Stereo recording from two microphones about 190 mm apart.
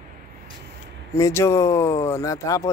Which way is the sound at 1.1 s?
15° left (ahead or behind).